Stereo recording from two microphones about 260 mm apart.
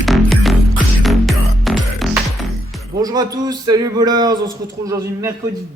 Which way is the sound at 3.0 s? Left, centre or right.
Centre.